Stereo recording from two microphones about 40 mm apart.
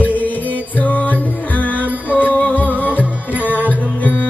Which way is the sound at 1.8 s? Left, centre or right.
Right.